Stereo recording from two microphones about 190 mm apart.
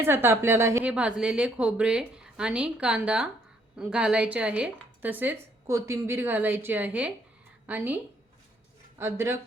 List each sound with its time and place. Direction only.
0.0 s a woman's voice: 10° right (ahead or behind)
9.0 s a woman's voice: 15° right (ahead or behind)